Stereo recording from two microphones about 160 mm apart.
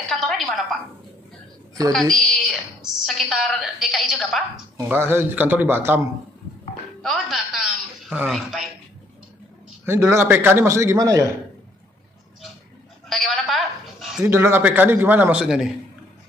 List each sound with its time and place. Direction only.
0.0 s a sound: centre (ahead or behind)
1.9 s a woman's voice: centre (ahead or behind)
4.8 s a man's voice: 15° right (ahead or behind)
7.0 s speech: centre (ahead or behind)
9.8 s a man's voice: 15° right (ahead or behind)
13.1 s a sound: centre (ahead or behind)
14.2 s a man's voice: 15° right (ahead or behind)